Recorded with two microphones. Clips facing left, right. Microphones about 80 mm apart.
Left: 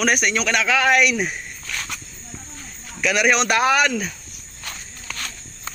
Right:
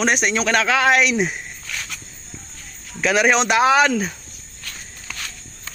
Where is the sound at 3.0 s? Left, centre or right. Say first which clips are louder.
Right 2 dB; right.